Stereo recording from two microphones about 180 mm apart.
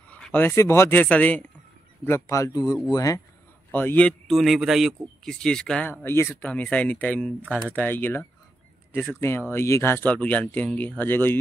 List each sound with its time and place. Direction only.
0.1 s speech: 10° left (ahead or behind)
9.5 s speech: 15° left (ahead or behind)